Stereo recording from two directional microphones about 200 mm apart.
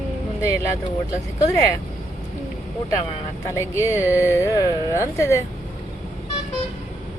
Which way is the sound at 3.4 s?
15° left (ahead or behind).